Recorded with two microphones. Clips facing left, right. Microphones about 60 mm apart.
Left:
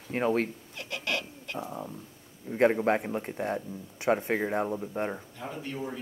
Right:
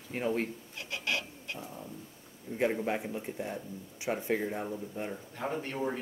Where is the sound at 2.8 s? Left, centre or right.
Left.